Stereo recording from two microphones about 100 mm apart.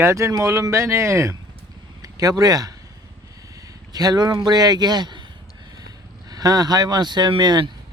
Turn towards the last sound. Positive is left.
turn(degrees=-45)  # may be behind; listen again after turning